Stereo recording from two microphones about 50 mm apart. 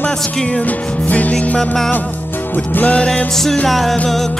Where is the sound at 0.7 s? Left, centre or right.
Left.